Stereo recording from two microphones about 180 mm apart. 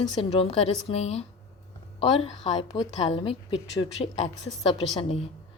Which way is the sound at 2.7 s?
30° left (ahead or behind).